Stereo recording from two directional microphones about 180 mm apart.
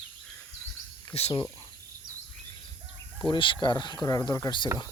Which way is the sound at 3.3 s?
25° left (ahead or behind).